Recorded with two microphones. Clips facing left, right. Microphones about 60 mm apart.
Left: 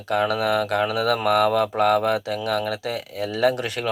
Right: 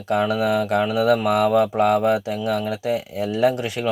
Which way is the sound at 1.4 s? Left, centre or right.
Centre.